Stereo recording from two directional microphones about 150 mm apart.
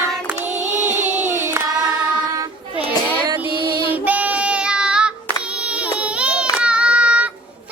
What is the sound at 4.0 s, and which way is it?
Child singing, 10° right (ahead or behind).